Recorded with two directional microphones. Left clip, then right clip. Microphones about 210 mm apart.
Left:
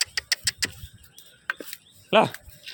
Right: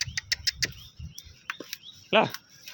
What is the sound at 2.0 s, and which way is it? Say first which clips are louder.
Speech: left 3 dB; 15° left (ahead or behind).